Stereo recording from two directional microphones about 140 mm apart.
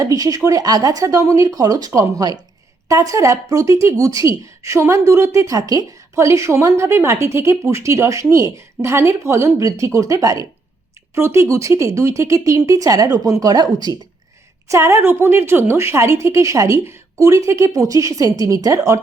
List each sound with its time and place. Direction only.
0.0 s speech: 25° right (ahead or behind)